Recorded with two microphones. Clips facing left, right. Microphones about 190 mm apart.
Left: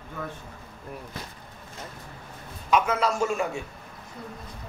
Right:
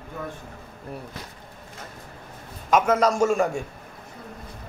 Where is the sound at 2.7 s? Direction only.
45° right (ahead or behind).